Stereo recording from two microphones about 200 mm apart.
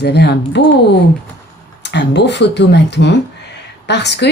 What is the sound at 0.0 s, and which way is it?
Speech, 55° left (ahead or behind).